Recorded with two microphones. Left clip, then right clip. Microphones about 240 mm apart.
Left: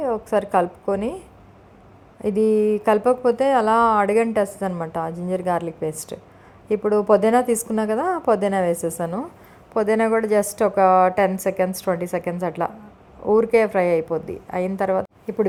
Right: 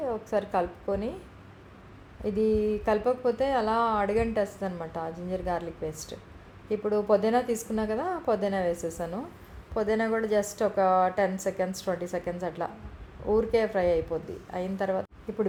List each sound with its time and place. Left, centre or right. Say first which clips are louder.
0.0 s speech: left 8 dB; left
2.2 s speech: left 8 dB; left